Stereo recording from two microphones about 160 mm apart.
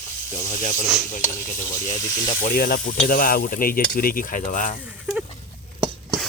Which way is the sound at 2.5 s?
70° left (ahead or behind).